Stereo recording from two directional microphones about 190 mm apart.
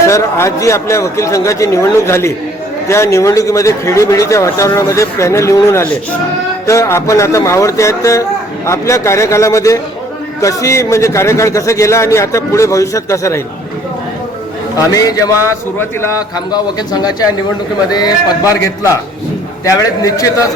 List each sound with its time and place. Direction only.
0.1 s speech: 15° left (ahead or behind)
14.8 s a man's voice: 20° left (ahead or behind)